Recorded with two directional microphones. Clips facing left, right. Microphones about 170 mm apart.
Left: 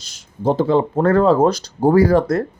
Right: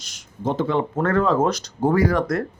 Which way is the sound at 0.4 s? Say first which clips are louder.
Left 6 dB; 35° left (ahead or behind).